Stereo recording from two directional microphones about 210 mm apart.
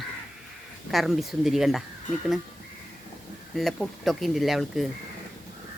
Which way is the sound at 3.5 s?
Centre (ahead or behind).